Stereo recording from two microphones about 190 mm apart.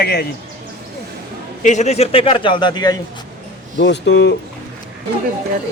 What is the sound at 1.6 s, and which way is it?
A man's voice, 40° left (ahead or behind).